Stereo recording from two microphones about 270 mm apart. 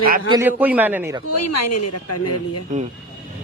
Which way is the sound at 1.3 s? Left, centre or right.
Left.